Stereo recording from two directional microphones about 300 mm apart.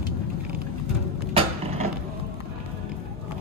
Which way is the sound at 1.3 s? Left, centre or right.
Centre.